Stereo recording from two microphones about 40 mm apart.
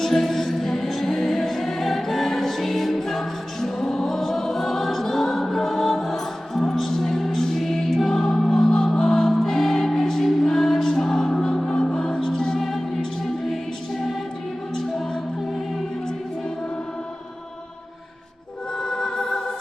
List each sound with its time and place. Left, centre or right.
0.0 s music: centre
12.5 s music: centre
18.8 s music: centre